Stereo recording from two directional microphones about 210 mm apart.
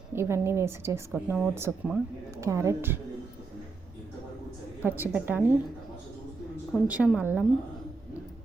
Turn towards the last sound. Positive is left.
turn(degrees=-5)  # may be behind; listen again after turning